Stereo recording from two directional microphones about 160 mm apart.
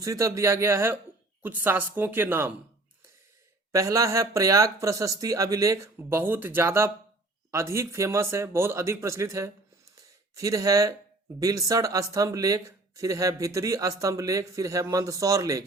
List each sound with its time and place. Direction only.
0.0 s speech: 20° right (ahead or behind)
3.7 s speech: 20° right (ahead or behind)